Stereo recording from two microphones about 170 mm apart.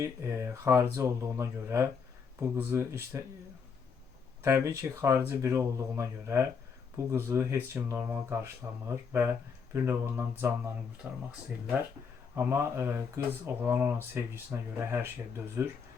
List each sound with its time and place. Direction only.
0.0 s speech: 15° right (ahead or behind)
4.4 s speech: 15° right (ahead or behind)
12.4 s speech: 15° right (ahead or behind)